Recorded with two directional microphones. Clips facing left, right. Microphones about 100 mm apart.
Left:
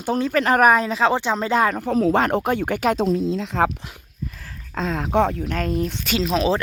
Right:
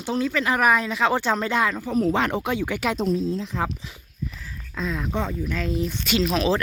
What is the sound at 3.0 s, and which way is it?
Speech, 80° left.